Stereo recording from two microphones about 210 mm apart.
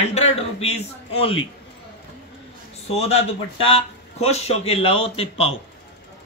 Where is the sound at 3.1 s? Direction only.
30° left (ahead or behind).